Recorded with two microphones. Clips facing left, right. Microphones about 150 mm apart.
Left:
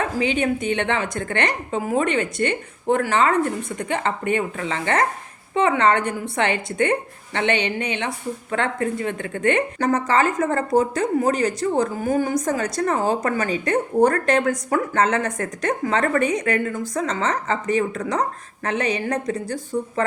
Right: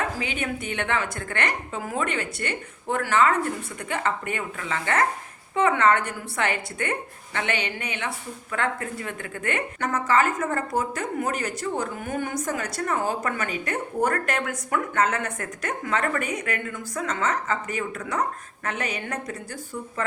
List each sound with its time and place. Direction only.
0.2 s a woman's voice: 25° left (ahead or behind)
9.7 s a woman's voice: 35° left (ahead or behind)